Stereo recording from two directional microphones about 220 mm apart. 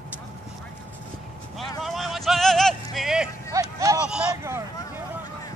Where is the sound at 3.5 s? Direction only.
15° right (ahead or behind).